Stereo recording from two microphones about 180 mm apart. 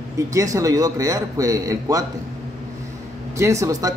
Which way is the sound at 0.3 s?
15° right (ahead or behind).